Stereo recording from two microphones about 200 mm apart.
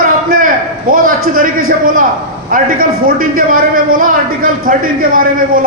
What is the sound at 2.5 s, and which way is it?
A man's voice, 45° right (ahead or behind).